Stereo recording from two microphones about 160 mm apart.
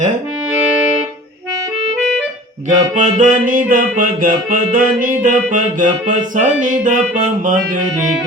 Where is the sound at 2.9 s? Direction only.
50° right (ahead or behind).